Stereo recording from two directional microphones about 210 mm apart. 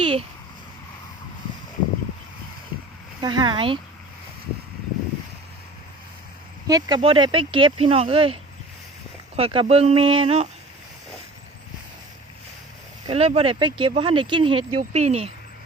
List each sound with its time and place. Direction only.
0.0 s a sound: 25° right (ahead or behind)
3.2 s speech: 20° right (ahead or behind)
6.7 s speech: 20° right (ahead or behind)
13.1 s speech: 30° right (ahead or behind)
14.8 s speech: 35° right (ahead or behind)